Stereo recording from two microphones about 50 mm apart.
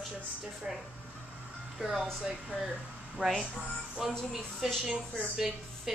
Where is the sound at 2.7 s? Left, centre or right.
Centre.